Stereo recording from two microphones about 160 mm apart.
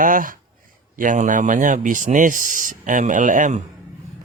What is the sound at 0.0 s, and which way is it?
Speech, 60° right (ahead or behind).